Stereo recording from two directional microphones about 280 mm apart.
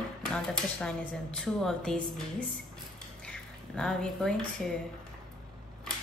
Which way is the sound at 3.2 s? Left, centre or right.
Centre.